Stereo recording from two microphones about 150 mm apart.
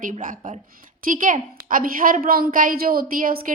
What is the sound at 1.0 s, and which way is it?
A woman's voice, 60° right (ahead or behind).